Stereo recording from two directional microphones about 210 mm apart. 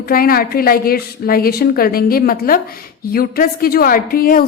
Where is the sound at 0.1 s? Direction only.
45° left (ahead or behind).